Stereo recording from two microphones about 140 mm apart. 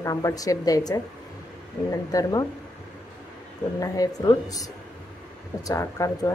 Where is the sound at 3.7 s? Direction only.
25° left (ahead or behind).